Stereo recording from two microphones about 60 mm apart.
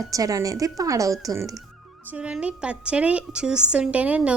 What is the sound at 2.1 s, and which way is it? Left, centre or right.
A woman's voice, centre.